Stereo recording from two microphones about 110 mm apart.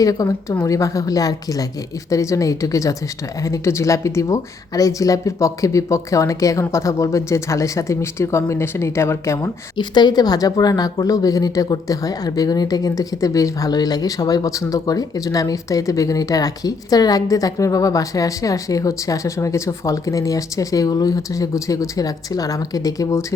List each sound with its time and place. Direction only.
0.0 s a woman's voice: 35° left (ahead or behind)
9.7 s a woman's voice: 40° left (ahead or behind)